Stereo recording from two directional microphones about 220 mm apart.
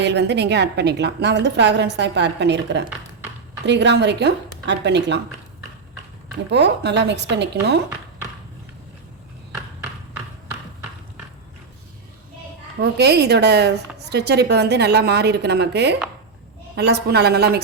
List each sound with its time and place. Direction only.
0.0 s a woman's voice: 50° right (ahead or behind)
6.5 s a woman's voice: 50° right (ahead or behind)
12.8 s a woman's voice: 50° right (ahead or behind)